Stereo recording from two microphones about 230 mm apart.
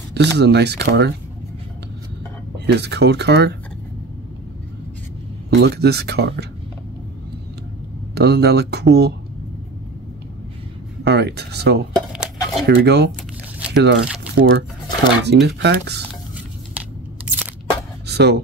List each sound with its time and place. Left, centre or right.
0.1 s speech: right
2.6 s speech: right
5.5 s speech: right
8.1 s speech: right
11.1 s speech: right
11.9 s dishes: centre
12.6 s speech: right
16.7 s crunch: centre
18.0 s a sound: right